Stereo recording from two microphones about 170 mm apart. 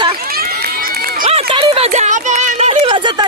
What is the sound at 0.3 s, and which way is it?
Run, 60° right (ahead or behind).